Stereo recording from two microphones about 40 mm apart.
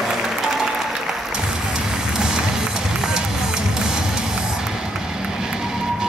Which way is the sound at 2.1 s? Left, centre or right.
Centre.